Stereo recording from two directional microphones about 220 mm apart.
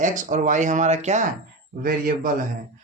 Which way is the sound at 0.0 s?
35° right (ahead or behind).